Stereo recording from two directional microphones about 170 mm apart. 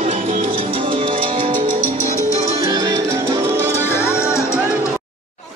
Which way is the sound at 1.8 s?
15° left (ahead or behind).